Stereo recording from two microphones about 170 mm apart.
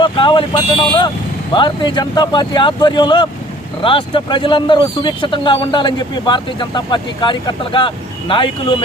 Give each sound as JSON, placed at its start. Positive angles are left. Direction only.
{"t": 0.0, "sound": "speech", "side_deg": 30}